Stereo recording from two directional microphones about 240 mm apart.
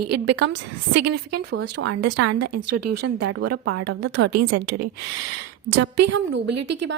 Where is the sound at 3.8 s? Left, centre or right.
Right.